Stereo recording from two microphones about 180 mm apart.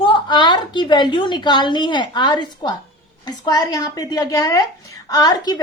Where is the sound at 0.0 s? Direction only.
25° left (ahead or behind).